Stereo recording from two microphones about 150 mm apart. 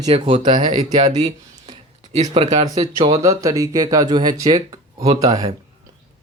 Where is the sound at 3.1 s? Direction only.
20° right (ahead or behind).